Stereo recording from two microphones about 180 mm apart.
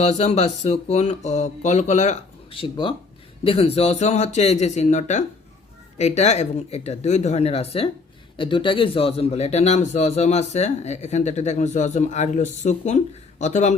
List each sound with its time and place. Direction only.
0.0 s a man's voice: 40° left (ahead or behind)